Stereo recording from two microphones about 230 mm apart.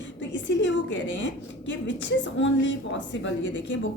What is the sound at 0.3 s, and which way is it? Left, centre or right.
A woman's voice, left.